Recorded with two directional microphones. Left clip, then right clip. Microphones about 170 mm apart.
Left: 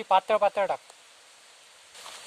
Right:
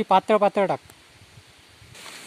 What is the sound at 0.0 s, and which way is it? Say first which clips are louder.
Speech: right 4 dB; 50° right (ahead or behind).